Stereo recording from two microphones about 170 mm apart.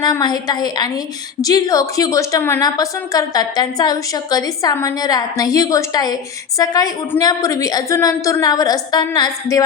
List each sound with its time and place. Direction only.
0.0 s a woman's voice: 25° left (ahead or behind)